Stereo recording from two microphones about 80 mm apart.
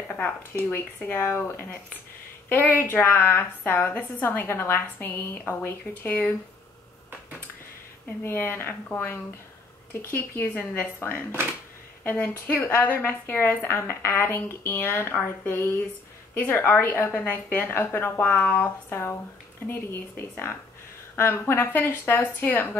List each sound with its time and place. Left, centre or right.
0.5 s a woman's voice: left
2.5 s a woman's voice: left
8.2 s a woman's voice: left